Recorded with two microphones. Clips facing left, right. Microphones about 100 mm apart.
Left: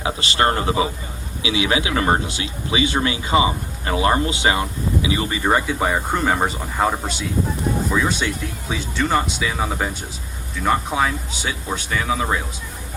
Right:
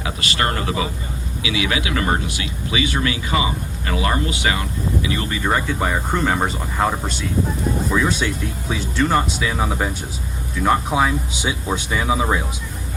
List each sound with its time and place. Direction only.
0.0 s speech: 30° left (ahead or behind)
5.0 s speech: 10° left (ahead or behind); by 12.4 s 15° right (ahead or behind)